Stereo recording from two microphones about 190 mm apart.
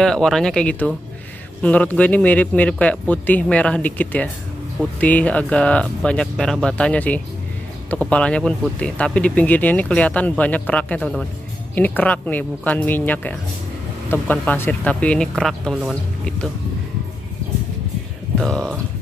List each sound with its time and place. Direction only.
0.0 s speech: centre (ahead or behind)
18.4 s speech: 5° left (ahead or behind)